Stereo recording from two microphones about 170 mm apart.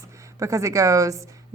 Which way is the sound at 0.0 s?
20° right (ahead or behind).